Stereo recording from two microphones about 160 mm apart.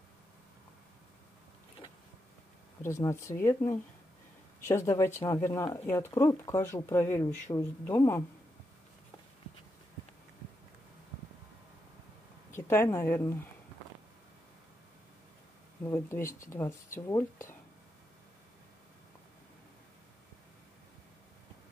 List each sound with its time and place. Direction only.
2.8 s speech: 15° left (ahead or behind)
12.4 s speech: 15° left (ahead or behind)
15.8 s speech: 15° left (ahead or behind)